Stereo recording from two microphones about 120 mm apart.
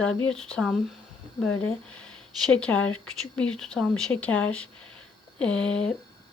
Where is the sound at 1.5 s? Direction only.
15° left (ahead or behind).